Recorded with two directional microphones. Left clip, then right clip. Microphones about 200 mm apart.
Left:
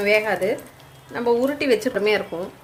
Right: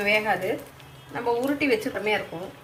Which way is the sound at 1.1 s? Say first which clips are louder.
Left 5 dB; 55° left (ahead or behind).